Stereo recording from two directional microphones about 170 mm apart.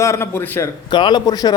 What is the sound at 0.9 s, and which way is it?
Speech, 25° left (ahead or behind).